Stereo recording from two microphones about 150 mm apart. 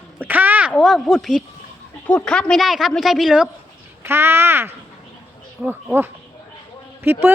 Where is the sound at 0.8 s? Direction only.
Centre (ahead or behind).